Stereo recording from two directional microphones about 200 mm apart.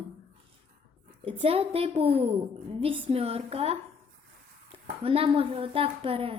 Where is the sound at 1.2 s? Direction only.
30° right (ahead or behind).